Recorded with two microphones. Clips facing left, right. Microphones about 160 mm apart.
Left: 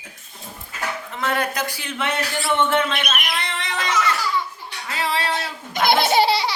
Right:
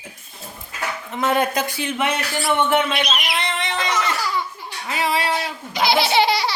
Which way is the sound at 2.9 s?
50° left (ahead or behind).